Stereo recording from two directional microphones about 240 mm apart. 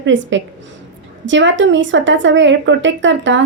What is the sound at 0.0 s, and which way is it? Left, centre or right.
A woman's voice, right.